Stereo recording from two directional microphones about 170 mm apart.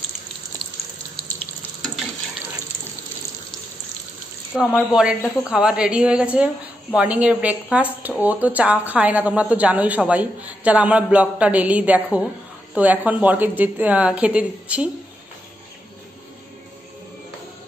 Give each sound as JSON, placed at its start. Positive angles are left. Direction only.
{"t": 4.5, "sound": "a woman's voice", "side_deg": 0}